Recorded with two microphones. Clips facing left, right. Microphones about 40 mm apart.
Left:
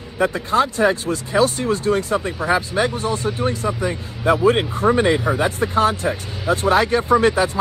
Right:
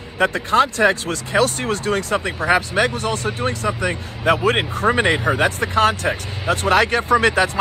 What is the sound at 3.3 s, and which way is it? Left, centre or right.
Speech, right.